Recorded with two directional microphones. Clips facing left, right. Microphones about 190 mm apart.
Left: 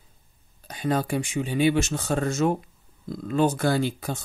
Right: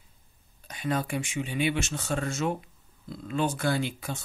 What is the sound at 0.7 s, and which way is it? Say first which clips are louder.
Speech: left 4 dB; 35° left (ahead or behind).